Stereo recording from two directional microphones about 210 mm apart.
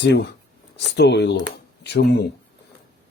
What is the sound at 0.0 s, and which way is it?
Speech, 55° left (ahead or behind).